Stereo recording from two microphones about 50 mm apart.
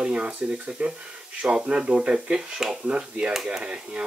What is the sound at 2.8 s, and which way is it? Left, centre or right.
Speech, right.